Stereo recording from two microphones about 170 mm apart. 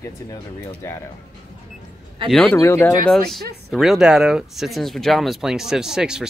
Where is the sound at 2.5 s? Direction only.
15° left (ahead or behind).